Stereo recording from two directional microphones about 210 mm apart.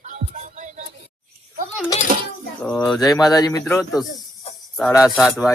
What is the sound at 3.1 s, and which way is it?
Speech, 15° left (ahead or behind).